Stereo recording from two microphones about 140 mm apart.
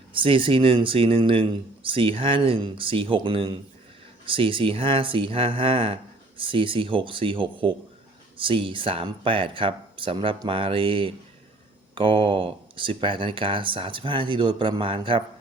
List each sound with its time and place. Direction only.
0.1 s speech: 40° right (ahead or behind)